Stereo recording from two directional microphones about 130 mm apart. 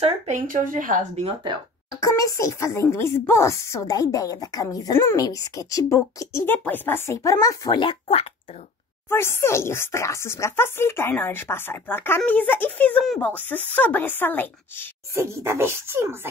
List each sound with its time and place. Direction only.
0.0 s speech: 75° right (ahead or behind)
1.2 s speech: 40° right (ahead or behind)
1.9 s speech: 25° left (ahead or behind); by 8.3 s 45° left (ahead or behind)
9.1 s speech: 20° left (ahead or behind)
15.1 s speech: 20° right (ahead or behind)